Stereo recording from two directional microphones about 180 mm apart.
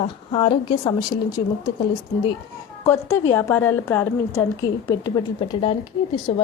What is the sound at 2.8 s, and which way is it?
A woman's voice, 15° left (ahead or behind).